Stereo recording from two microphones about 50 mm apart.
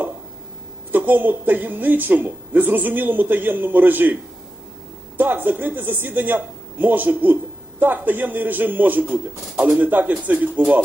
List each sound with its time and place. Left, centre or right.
0.9 s speech: right